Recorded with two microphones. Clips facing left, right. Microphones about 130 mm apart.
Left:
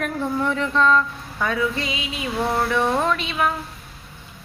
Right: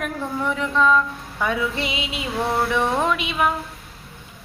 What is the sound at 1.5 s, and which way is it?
Speech, 20° right (ahead or behind).